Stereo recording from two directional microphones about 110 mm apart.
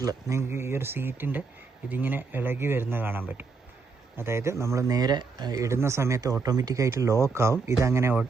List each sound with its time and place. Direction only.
0.0 s speech: 30° right (ahead or behind)